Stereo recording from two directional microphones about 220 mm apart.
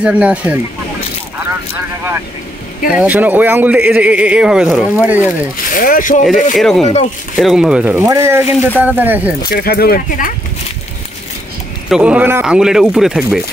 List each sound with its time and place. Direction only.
0.0 s speech: 5° right (ahead or behind)
2.9 s speech: 5° right (ahead or behind)
5.7 s speech: 40° left (ahead or behind)
6.5 s speech: centre (ahead or behind)
6.8 s speech: 30° left (ahead or behind)
7.3 s speech: centre (ahead or behind)
9.5 s speech: 45° left (ahead or behind)
11.9 s speech: 5° right (ahead or behind)